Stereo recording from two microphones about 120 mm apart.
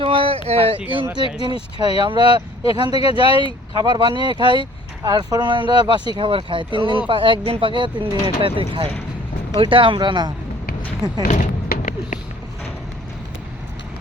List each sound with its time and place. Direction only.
0.0 s a sound: 50° right (ahead or behind)
0.4 s speech: 55° right (ahead or behind)
0.8 s speech: 15° right (ahead or behind)
1.4 s speech: 40° right (ahead or behind)
3.0 s speech: 50° left (ahead or behind)
3.8 s speech: 40° right (ahead or behind)
11.3 s a sound: 90° left